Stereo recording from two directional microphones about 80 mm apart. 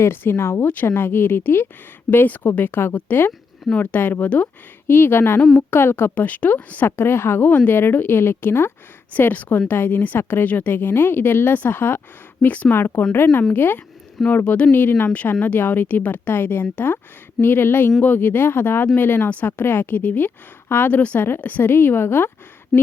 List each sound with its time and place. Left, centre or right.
0.0 s a woman's voice: left
12.7 s a woman's voice: left
22.7 s a sound: centre